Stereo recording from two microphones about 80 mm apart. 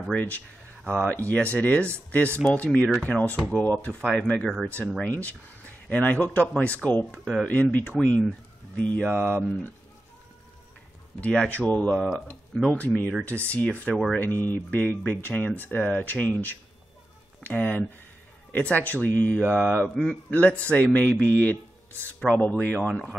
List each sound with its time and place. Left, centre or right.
0.1 s speech: centre
11.1 s speech: centre